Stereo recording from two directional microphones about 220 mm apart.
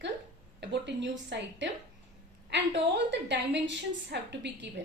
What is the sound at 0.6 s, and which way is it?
A woman's voice, 55° right (ahead or behind).